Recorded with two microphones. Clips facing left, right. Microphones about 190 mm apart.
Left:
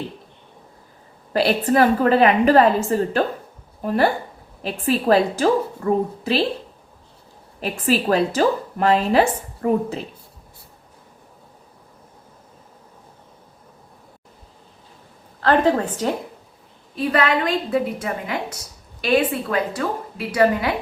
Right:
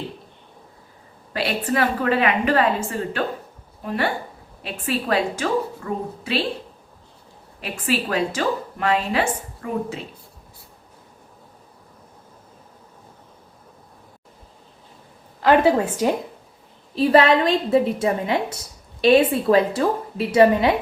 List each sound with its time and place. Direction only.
1.3 s speech: 40° left (ahead or behind)
7.6 s speech: 40° left (ahead or behind)
15.4 s a woman's voice: 10° right (ahead or behind)
16.9 s a woman's voice: 30° right (ahead or behind)